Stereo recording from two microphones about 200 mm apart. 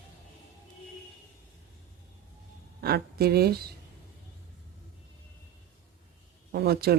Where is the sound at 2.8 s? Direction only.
50° right (ahead or behind).